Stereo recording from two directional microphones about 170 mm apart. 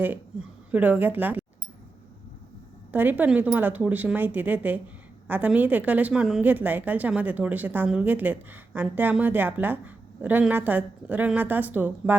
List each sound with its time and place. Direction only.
0.0 s a woman's voice: 10° right (ahead or behind)
2.9 s a woman's voice: 10° right (ahead or behind)